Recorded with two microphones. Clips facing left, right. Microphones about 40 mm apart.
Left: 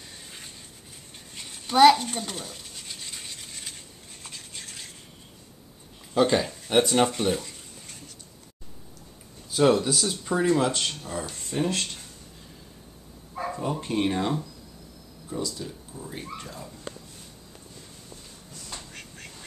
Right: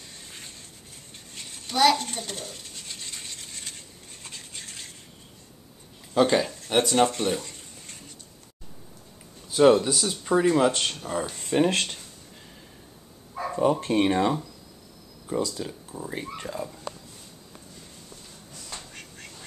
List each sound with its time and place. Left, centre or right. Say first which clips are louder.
1.7 s speech: left 5 dB; centre
2.0 s toothbrush: left 1 dB; centre
6.1 s speech: right 1 dB; centre
9.5 s speech: right 3 dB; centre
11.4 s speech: right 5 dB; right
13.6 s speech: right 7 dB; right
14.0 s speech: right 4 dB; right
15.3 s speech: right 4 dB; right
15.9 s speech: right 3 dB; right
18.7 s a sound: even; centre